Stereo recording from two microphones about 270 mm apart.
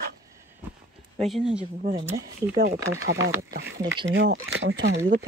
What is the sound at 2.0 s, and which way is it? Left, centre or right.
Speech, centre.